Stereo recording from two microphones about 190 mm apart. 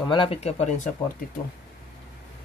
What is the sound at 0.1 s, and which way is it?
Speech, 30° left (ahead or behind).